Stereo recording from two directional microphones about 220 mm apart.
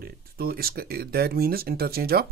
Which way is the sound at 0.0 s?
45° right (ahead or behind).